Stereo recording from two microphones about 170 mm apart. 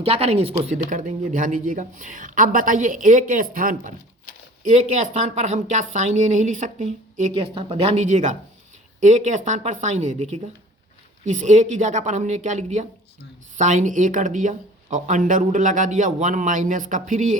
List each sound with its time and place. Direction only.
0.0 s speech: 35° right (ahead or behind)